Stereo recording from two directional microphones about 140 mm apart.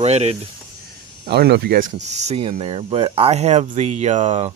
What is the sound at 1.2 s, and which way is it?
Speech, 90° right.